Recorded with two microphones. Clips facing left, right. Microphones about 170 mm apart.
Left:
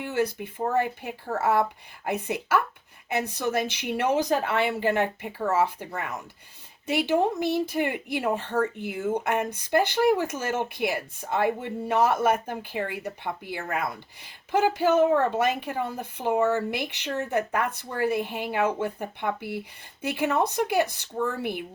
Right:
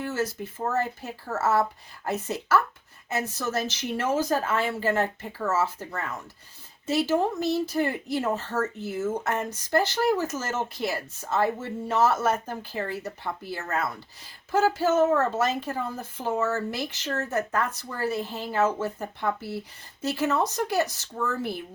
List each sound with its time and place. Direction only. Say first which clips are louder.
0.0 s speech: left 2 dB; 15° left (ahead or behind)